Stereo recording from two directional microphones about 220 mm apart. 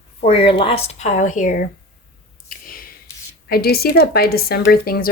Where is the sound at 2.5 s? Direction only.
40° left (ahead or behind).